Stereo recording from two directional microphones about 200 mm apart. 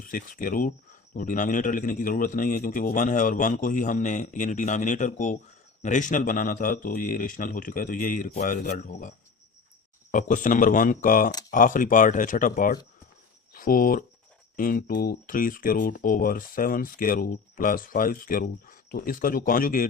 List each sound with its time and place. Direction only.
0.0 s a man's voice: 40° left (ahead or behind)